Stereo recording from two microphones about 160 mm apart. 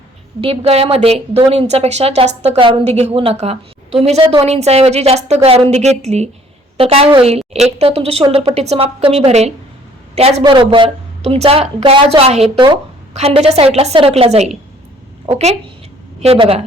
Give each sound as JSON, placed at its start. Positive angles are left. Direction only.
{"t": 0.4, "sound": "a woman's voice", "side_deg": -35}